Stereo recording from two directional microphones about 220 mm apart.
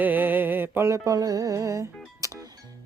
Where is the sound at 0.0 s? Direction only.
10° right (ahead or behind).